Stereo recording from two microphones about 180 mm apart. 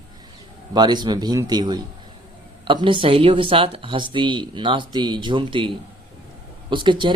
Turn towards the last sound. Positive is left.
turn(degrees=-25)  # may be behind; listen again after turning